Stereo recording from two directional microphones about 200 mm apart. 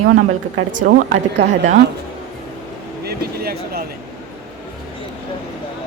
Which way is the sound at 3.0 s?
50° right (ahead or behind).